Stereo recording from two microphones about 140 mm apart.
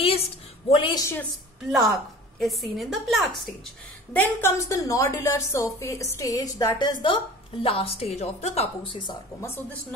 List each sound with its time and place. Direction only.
0.0 s a sound: 45° left (ahead or behind)
1.9 s a woman's voice: centre (ahead or behind)
4.1 s a woman's voice: 15° left (ahead or behind); by 8.9 s 50° left (ahead or behind)